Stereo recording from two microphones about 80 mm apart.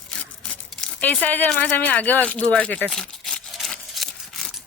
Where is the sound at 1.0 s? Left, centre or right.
Left.